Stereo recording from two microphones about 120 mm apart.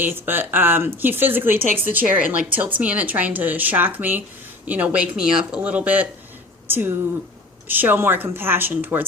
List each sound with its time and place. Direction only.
0.0 s speech: 20° right (ahead or behind)